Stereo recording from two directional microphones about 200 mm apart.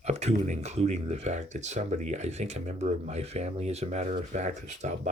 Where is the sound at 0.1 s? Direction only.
35° right (ahead or behind).